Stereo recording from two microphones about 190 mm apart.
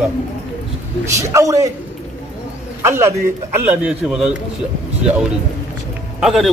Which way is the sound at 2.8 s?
15° right (ahead or behind).